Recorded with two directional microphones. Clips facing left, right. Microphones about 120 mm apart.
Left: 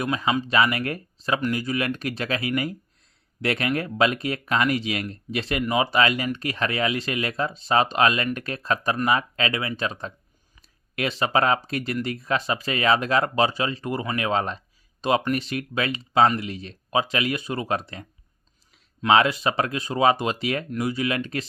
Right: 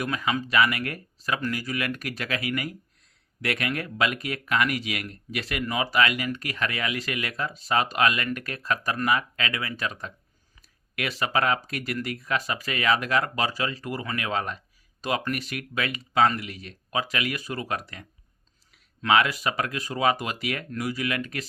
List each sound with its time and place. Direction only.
0.0 s speech: 25° left (ahead or behind)